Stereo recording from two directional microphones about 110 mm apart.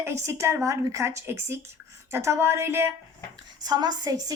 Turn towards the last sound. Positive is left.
turn(degrees=-35)  # may be behind; listen again after turning